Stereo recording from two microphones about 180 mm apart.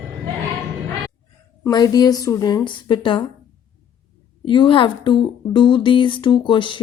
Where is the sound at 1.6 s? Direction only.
20° left (ahead or behind).